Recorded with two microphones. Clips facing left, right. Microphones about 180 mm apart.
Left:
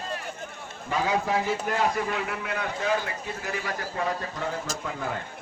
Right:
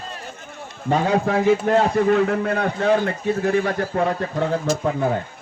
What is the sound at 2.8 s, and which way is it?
A man's voice, 60° right (ahead or behind).